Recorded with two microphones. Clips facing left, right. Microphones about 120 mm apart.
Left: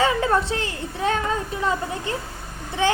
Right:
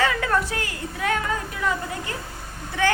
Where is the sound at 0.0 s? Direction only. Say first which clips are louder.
Left 3 dB; 25° left (ahead or behind).